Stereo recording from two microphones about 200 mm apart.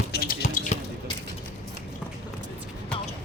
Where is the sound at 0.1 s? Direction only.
55° left (ahead or behind).